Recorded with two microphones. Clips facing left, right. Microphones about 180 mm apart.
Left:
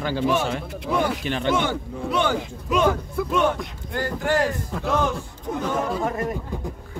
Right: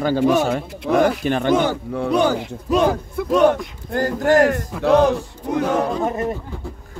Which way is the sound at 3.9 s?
45° right (ahead or behind).